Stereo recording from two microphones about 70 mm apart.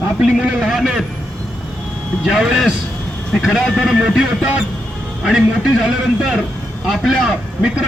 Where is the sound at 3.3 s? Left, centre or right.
Centre.